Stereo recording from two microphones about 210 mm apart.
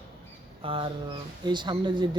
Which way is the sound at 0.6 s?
25° right (ahead or behind).